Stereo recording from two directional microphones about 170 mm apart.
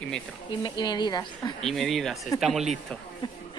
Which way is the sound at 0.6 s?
25° left (ahead or behind).